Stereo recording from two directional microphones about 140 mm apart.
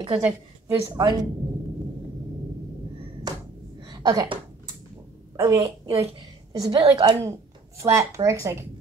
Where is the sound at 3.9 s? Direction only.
30° right (ahead or behind).